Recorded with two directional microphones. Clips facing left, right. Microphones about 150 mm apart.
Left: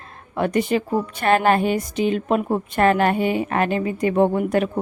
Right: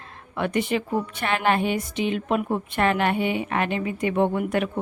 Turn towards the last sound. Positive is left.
turn(degrees=35)  # may be behind; listen again after turning